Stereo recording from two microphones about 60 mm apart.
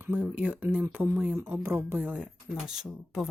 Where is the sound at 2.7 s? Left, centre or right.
Centre.